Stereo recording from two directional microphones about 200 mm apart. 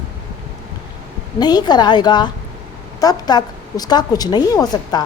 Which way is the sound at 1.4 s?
20° left (ahead or behind).